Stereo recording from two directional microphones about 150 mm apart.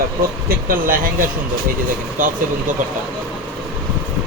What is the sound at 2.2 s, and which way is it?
Speech, 65° right (ahead or behind).